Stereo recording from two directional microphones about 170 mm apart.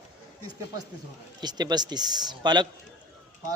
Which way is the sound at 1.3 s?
25° right (ahead or behind).